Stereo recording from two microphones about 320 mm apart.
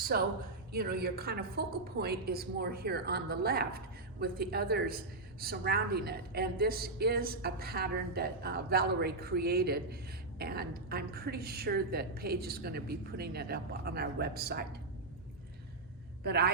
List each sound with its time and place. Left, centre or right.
0.1 s a woman's voice: right
16.2 s a woman's voice: right